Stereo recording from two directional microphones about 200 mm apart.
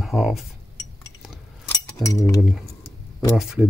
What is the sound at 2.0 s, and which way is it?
Cutlery, 15° left (ahead or behind).